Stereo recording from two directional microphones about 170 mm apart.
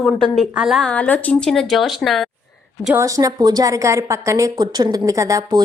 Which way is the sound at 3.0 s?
20° right (ahead or behind).